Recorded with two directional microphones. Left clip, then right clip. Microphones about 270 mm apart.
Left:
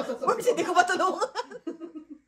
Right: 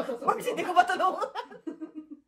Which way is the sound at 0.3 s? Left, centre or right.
Left.